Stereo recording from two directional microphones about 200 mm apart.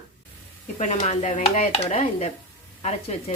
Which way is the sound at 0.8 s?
35° left (ahead or behind).